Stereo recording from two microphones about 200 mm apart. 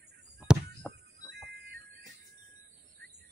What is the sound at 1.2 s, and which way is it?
Music, 55° right (ahead or behind).